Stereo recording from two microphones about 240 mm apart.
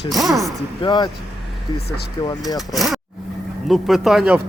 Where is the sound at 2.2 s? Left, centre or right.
Centre.